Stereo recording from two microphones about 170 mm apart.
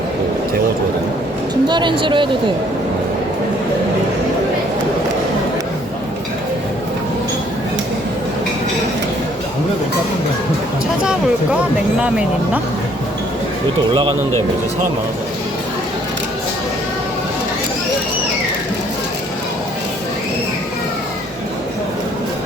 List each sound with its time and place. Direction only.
1.6 s speech: 25° right (ahead or behind)
11.9 s speech: 5° right (ahead or behind)
13.9 s speech: 30° right (ahead or behind)